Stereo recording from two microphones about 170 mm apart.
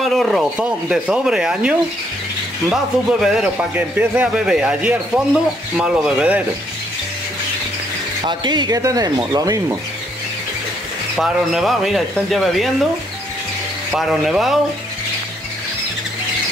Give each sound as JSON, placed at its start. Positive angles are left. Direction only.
{"t": 0.0, "sound": "speech", "side_deg": 0}
{"t": 8.2, "sound": "speech", "side_deg": -25}
{"t": 11.1, "sound": "speech", "side_deg": 0}
{"t": 13.9, "sound": "speech", "side_deg": 0}